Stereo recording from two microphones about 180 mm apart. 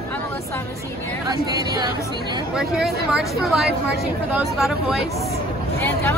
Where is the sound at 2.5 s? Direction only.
Centre (ahead or behind).